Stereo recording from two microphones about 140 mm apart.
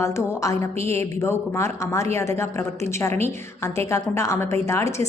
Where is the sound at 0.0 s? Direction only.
20° left (ahead or behind).